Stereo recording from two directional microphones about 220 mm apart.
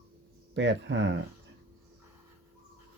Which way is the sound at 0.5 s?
55° right (ahead or behind).